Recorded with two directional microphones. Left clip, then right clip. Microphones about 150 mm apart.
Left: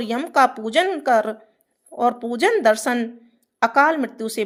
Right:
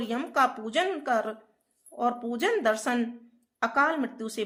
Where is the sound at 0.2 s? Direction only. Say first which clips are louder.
Left 8 dB; 45° left (ahead or behind).